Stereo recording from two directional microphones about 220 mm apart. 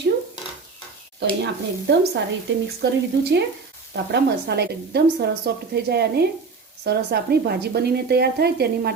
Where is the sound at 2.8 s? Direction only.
50° right (ahead or behind).